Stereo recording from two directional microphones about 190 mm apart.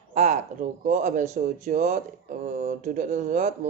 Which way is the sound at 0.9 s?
40° right (ahead or behind).